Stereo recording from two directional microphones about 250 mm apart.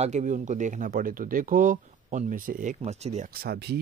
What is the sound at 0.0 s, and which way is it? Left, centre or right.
Speech, right.